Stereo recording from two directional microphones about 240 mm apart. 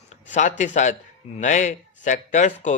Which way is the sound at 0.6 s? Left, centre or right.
Left.